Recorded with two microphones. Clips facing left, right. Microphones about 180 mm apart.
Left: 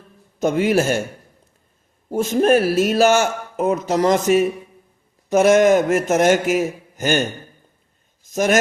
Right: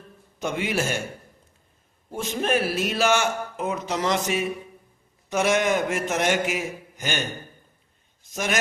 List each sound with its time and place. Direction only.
0.3 s speech: 45° left (ahead or behind)
2.0 s speech: 40° left (ahead or behind)